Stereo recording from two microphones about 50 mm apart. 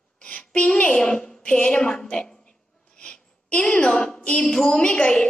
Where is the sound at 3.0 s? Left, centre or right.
Left.